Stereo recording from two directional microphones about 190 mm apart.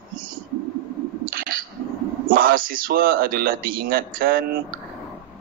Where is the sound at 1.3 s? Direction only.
50° right (ahead or behind).